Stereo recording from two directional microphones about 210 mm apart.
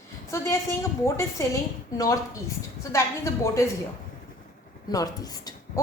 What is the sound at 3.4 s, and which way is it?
Speech, 15° left (ahead or behind).